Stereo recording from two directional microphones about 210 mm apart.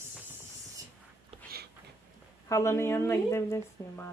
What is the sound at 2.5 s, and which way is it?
Speech, 15° left (ahead or behind).